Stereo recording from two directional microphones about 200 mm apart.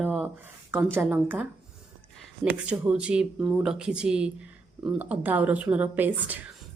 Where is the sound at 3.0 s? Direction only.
5° right (ahead or behind).